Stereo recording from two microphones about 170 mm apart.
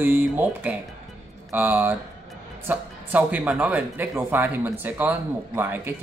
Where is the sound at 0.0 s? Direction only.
10° right (ahead or behind).